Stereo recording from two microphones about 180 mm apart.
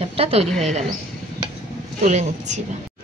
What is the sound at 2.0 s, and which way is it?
Speech, 40° right (ahead or behind).